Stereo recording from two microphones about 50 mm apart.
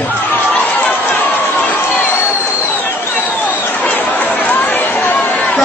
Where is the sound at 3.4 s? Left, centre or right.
Left.